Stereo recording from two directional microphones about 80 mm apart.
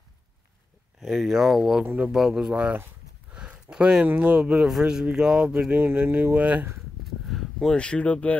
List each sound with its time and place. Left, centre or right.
1.0 s speech: centre
1.9 s speech: right
2.1 s speech: centre
5.8 s speech: right
7.2 s a sound: centre
7.7 s speech: centre